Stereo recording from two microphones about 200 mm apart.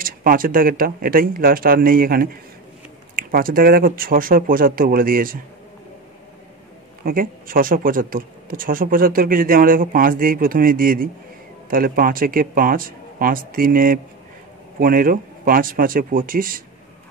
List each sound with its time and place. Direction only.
0.0 s speech: 45° right (ahead or behind)
7.1 s speech: 45° right (ahead or behind)